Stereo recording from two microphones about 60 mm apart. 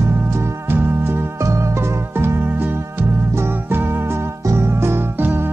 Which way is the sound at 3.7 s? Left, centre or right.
Right.